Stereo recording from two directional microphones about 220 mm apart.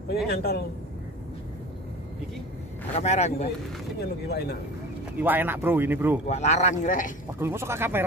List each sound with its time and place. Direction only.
0.3 s speech: 45° left (ahead or behind)
2.9 s speech: 30° left (ahead or behind)
4.0 s speech: 45° left (ahead or behind)
5.2 s speech: 10° right (ahead or behind)
6.2 s speech: 30° left (ahead or behind)
7.3 s speech: 10° right (ahead or behind)